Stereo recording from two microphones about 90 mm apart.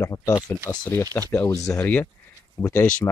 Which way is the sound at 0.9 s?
35° left (ahead or behind).